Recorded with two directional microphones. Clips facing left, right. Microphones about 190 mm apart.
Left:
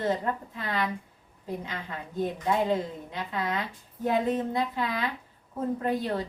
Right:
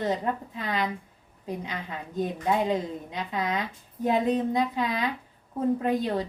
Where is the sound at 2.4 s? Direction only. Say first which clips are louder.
Right 1 dB; 20° right (ahead or behind).